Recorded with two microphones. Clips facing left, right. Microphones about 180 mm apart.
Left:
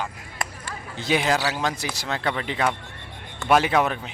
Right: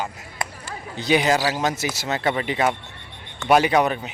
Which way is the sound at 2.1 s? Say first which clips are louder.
Right 3 dB; 5° right (ahead or behind).